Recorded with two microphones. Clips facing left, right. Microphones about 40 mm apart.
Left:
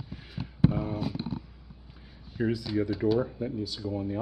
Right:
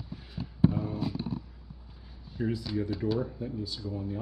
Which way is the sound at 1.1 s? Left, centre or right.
Left.